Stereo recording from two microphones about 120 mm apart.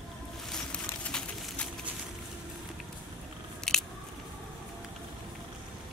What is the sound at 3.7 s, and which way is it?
Biting, 5° left (ahead or behind).